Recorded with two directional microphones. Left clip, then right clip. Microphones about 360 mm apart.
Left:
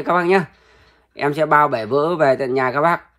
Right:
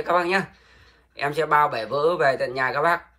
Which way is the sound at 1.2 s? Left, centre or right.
Centre.